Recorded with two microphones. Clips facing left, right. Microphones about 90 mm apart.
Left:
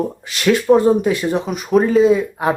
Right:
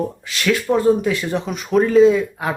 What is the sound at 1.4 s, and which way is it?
Speech, 5° left (ahead or behind).